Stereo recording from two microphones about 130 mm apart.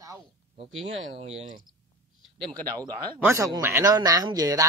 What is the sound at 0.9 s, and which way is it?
Speech, 50° right (ahead or behind).